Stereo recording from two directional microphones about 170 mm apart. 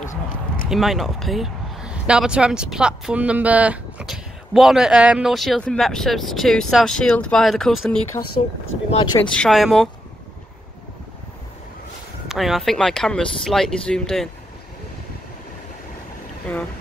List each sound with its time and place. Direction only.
0.7 s a man's voice: centre (ahead or behind)
8.9 s speech: 25° left (ahead or behind)
9.3 s a man's voice: centre (ahead or behind)
12.3 s a man's voice: centre (ahead or behind)
16.5 s boat: 10° left (ahead or behind)